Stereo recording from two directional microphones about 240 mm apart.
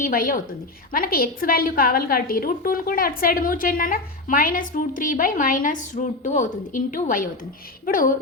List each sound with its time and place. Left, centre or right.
0.0 s a woman's voice: left